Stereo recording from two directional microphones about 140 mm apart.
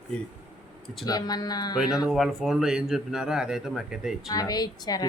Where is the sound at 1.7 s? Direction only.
5° right (ahead or behind).